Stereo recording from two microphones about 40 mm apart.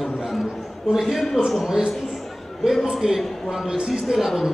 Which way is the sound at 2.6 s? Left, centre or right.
Centre.